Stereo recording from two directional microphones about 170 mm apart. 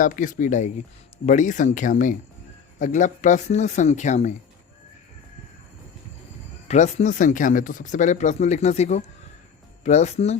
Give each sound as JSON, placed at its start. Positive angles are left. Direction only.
{"t": 0.0, "sound": "speech", "side_deg": 50}
{"t": 6.7, "sound": "speech", "side_deg": 45}